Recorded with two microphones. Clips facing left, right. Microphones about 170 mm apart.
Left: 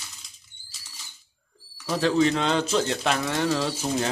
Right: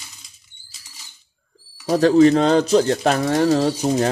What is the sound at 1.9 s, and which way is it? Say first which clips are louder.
Speech: right 9 dB; 40° right (ahead or behind).